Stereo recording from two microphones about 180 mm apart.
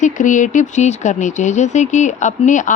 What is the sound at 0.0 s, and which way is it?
Speech, 45° left (ahead or behind).